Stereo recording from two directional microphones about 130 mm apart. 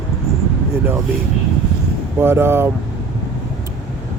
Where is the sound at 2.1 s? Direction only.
15° right (ahead or behind).